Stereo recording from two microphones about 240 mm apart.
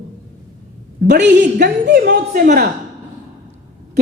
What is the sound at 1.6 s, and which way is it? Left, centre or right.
A woman's voice, right.